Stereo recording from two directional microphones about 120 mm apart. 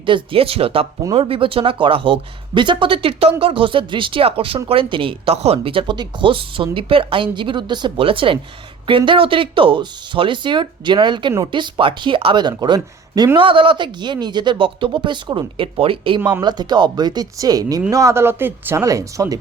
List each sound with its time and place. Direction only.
0.0 s speech: 45° right (ahead or behind)
13.4 s speech: 45° right (ahead or behind); by 19.4 s 25° right (ahead or behind)